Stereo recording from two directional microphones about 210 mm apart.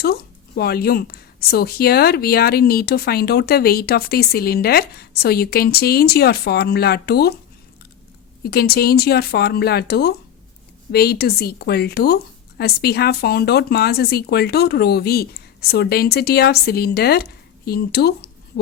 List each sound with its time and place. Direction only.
0.0 s a woman's voice: 45° left (ahead or behind)
8.4 s a woman's voice: 50° left (ahead or behind)